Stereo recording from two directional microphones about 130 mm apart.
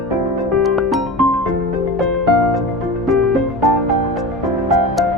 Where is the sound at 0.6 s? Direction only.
Centre (ahead or behind).